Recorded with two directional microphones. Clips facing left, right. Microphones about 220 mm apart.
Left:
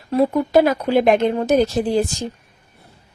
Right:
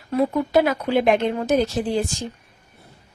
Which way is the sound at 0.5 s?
40° left (ahead or behind).